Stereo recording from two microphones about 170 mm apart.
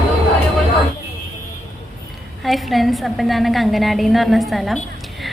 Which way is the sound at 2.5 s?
Centre (ahead or behind).